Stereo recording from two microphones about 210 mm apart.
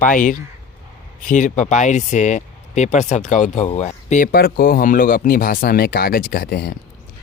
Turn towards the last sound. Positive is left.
turn(degrees=45)  # may be behind; listen again after turning